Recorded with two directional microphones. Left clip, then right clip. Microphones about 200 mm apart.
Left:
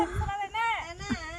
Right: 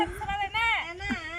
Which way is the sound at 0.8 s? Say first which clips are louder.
Right 3 dB; 65° left (ahead or behind).